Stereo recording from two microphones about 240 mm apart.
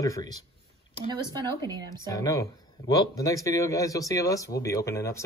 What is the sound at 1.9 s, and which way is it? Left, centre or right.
Speech, centre.